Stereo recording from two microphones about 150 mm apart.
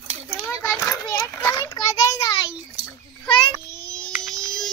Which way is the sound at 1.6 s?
25° left (ahead or behind).